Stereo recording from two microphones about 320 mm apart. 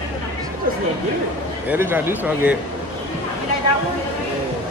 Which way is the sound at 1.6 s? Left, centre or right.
Centre.